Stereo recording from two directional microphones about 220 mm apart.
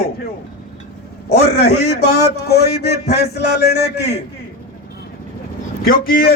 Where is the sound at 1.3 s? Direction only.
45° left (ahead or behind).